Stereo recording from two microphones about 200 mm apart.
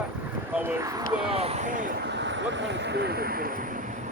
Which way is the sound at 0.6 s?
15° right (ahead or behind).